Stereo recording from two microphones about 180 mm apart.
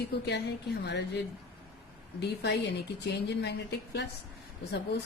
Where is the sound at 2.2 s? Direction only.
70° left (ahead or behind).